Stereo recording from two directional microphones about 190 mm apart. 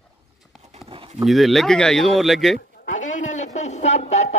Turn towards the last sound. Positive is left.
turn(degrees=35)  # may be behind; listen again after turning